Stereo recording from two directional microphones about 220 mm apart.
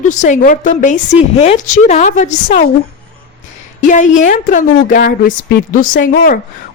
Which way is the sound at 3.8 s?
35° left (ahead or behind).